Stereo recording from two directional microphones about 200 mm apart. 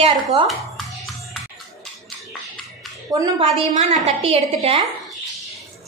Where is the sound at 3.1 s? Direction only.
20° right (ahead or behind).